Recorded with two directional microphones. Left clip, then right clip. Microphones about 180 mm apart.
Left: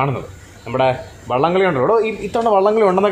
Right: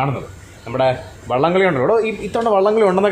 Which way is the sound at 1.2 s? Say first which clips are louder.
Even; 15° left (ahead or behind).